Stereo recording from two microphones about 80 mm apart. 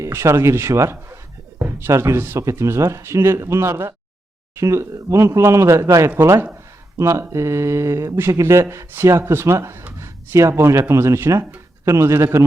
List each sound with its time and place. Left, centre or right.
0.0 s speech: right